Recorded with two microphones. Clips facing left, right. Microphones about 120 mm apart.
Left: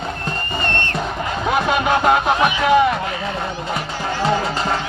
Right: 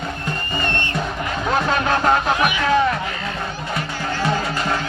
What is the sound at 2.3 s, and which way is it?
Music, 25° left (ahead or behind).